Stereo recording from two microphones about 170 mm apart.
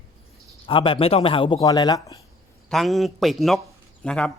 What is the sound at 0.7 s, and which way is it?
A man's voice, 30° left (ahead or behind).